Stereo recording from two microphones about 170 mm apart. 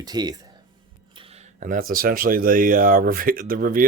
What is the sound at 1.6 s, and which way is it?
Speech, 50° right (ahead or behind).